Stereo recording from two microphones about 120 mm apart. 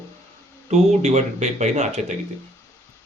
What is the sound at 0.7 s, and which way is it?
Speech, 70° right (ahead or behind).